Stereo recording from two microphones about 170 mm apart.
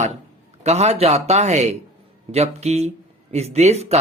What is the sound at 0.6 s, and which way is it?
A man's voice, 40° right (ahead or behind).